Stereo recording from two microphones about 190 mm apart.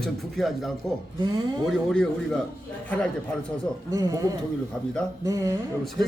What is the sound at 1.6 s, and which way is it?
Speech, 5° left (ahead or behind).